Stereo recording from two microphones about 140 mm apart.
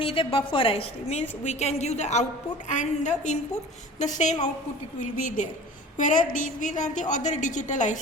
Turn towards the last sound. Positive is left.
turn(degrees=60)  # may be behind; listen again after turning